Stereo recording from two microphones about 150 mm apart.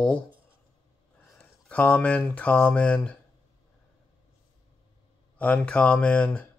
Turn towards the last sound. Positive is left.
turn(degrees=10)  # may be behind; listen again after turning